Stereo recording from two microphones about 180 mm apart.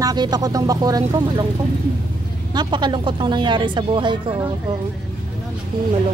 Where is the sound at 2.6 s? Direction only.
25° right (ahead or behind).